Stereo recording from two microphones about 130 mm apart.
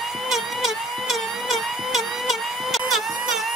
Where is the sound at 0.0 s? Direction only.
Centre (ahead or behind).